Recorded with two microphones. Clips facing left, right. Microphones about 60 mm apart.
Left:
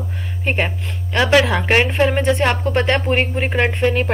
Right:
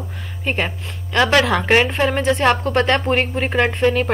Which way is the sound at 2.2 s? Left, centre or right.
Centre.